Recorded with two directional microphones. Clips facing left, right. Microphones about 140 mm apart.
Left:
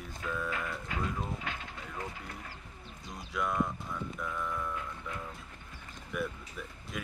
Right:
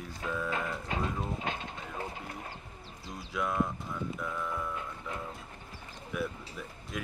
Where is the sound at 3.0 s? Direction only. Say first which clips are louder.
Right 1 dB; centre (ahead or behind).